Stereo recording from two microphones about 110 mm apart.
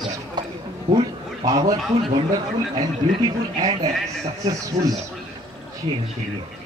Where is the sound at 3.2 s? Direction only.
35° right (ahead or behind).